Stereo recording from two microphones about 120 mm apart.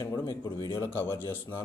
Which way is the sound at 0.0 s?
25° left (ahead or behind).